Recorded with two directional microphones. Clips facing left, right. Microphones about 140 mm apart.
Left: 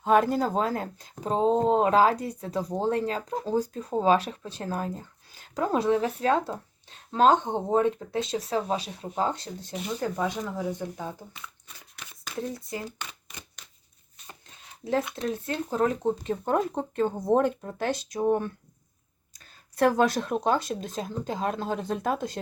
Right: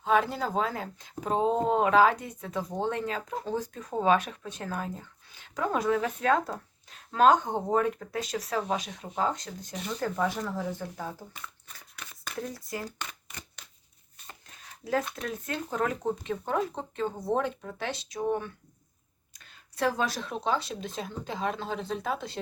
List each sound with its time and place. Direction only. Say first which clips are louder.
0.0 s speech: left 4 dB; 45° left (ahead or behind); by 9.7 s 30° left (ahead or behind)
10.0 s speech: right 1 dB; 15° left (ahead or behind)
12.4 s speech: left 3 dB; 25° left (ahead or behind)
15.1 s speech: left 4 dB; 30° left (ahead or behind); by 22.4 s 45° left (ahead or behind)